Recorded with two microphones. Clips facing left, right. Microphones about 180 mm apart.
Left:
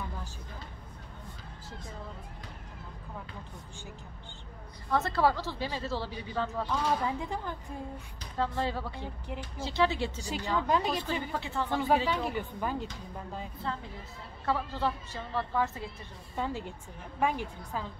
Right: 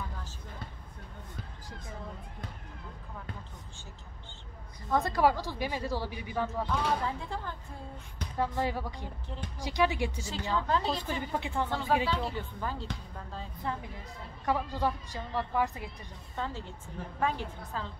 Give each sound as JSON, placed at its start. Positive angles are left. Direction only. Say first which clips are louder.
{"t": 4.8, "sound": "a woman's voice", "louder": "right 1 dB", "side_deg": -15}
{"t": 6.7, "sound": "speech", "louder": "left 3 dB", "side_deg": 15}
{"t": 8.4, "sound": "a woman's voice", "louder": "even", "side_deg": -15}
{"t": 10.5, "sound": "speech", "louder": "left 1 dB", "side_deg": 15}
{"t": 11.3, "sound": "a woman's voice", "louder": "right 1 dB", "side_deg": -15}
{"t": 12.1, "sound": "speech", "louder": "left 2 dB", "side_deg": 15}
{"t": 13.7, "sound": "a woman's voice", "louder": "right 2 dB", "side_deg": -15}
{"t": 16.3, "sound": "speech", "louder": "left 3 dB", "side_deg": 15}